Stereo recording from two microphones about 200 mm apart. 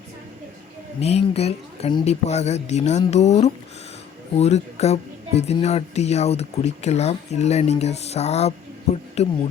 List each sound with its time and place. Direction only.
0.9 s speech: 30° left (ahead or behind)